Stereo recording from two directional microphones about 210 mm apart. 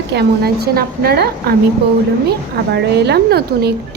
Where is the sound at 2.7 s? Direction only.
50° right (ahead or behind).